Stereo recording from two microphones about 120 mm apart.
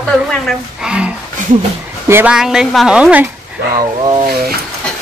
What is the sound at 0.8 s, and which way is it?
Speech, 10° right (ahead or behind).